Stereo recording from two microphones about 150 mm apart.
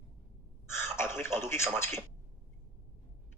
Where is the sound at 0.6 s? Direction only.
15° left (ahead or behind).